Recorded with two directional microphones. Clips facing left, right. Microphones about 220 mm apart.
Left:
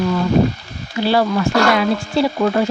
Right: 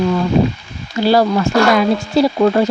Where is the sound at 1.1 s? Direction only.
40° right (ahead or behind).